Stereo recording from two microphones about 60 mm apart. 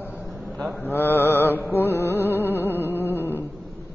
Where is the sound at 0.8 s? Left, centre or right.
Left.